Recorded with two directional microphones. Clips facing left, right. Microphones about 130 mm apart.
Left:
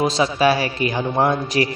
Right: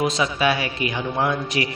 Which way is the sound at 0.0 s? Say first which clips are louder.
Left 4 dB; 35° left (ahead or behind).